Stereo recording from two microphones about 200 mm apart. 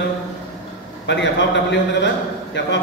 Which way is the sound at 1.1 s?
60° left (ahead or behind).